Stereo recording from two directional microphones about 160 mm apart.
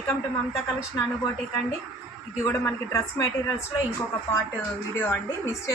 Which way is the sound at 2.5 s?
20° left (ahead or behind).